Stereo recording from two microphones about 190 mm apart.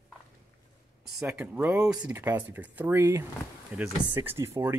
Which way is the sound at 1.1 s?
10° right (ahead or behind).